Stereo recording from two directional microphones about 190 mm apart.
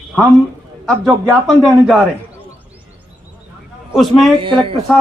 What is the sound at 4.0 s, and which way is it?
Speech, centre (ahead or behind).